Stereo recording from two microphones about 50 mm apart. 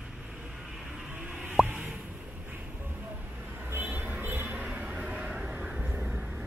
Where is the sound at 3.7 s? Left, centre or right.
Right.